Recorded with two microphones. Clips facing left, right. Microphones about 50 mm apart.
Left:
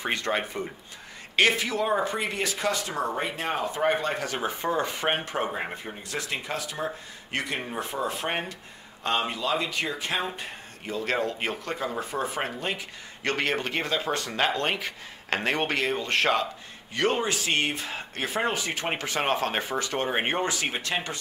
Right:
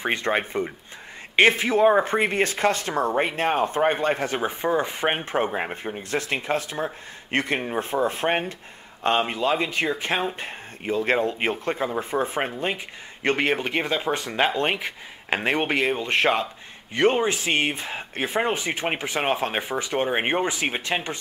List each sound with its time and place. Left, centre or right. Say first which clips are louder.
0.0 s speech: right 4 dB; right
4.5 s speech: right 1 dB; centre